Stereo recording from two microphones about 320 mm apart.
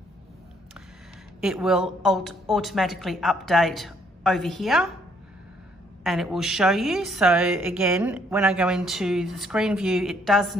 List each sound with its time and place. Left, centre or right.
1.4 s a woman's voice: centre
6.0 s a woman's voice: centre